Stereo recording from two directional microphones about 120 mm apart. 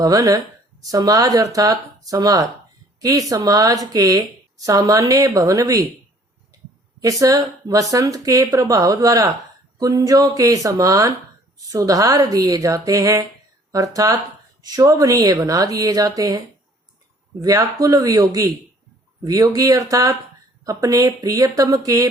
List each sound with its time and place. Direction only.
0.0 s a woman's voice: 30° right (ahead or behind)
7.0 s a woman's voice: 30° right (ahead or behind)
17.4 s a woman's voice: 30° right (ahead or behind)